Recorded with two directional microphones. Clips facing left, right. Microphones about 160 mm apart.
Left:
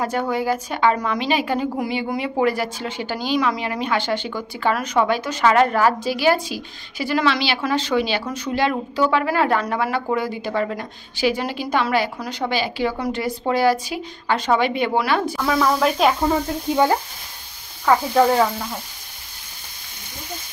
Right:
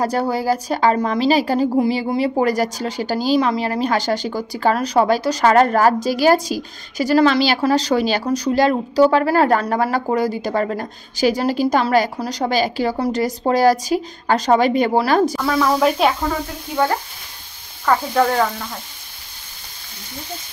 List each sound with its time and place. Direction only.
0.0 s a woman's voice: 35° right (ahead or behind)
15.3 s speech: centre (ahead or behind)
16.7 s speech: 15° left (ahead or behind)